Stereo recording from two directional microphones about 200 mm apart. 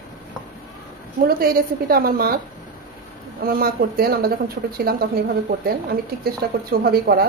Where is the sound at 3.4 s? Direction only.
45° right (ahead or behind).